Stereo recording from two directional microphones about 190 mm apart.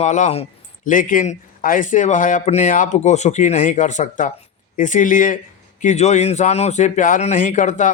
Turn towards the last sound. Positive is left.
turn(degrees=40)  # may be behind; listen again after turning